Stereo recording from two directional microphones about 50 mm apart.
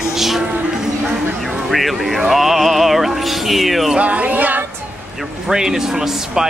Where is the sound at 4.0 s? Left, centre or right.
Right.